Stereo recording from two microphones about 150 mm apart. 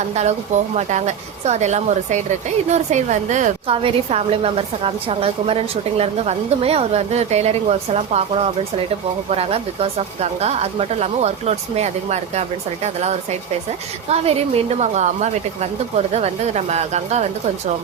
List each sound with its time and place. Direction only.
0.1 s a woman's voice: 50° right (ahead or behind)
3.8 s a woman's voice: 40° right (ahead or behind)